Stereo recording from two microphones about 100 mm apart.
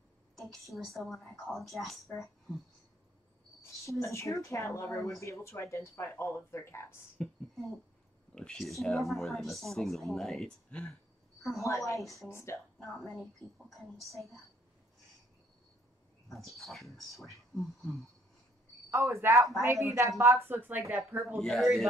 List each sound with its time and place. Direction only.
0.4 s speech: centre (ahead or behind)
4.0 s speech: 30° left (ahead or behind)
7.2 s speech: 10° left (ahead or behind)
8.4 s speech: 5° left (ahead or behind)
11.6 s speech: 30° left (ahead or behind)
12.0 s speech: centre (ahead or behind)
12.3 s speech: 25° left (ahead or behind)
12.7 s speech: 5° left (ahead or behind)
16.3 s speech: centre (ahead or behind)
18.9 s a woman's voice: 30° right (ahead or behind)
21.4 s speech: 5° left (ahead or behind)